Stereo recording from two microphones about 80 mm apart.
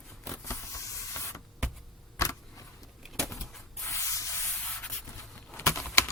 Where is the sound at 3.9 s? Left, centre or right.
Left.